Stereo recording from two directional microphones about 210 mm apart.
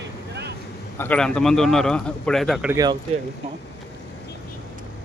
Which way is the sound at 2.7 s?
20° right (ahead or behind).